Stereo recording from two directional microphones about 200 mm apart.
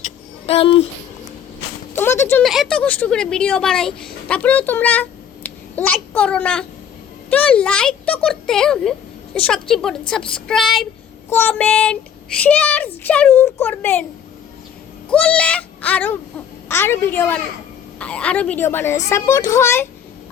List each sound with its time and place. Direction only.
0.4 s speech: 30° left (ahead or behind)
2.0 s a sound: 10° left (ahead or behind)
2.4 s speech: centre (ahead or behind)
10.1 s child singing: 5° left (ahead or behind)
11.3 s speech: 10° left (ahead or behind)
15.1 s a sound: 5° left (ahead or behind)
16.6 s speech: 10° left (ahead or behind)